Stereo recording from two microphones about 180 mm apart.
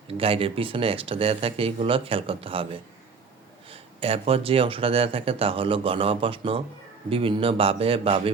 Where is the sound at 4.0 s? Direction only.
35° right (ahead or behind).